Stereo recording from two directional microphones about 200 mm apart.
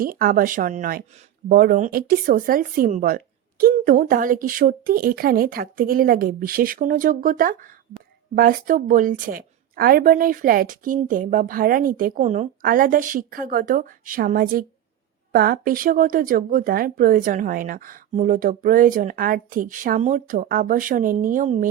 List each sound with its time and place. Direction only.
0.0 s speech: 45° right (ahead or behind)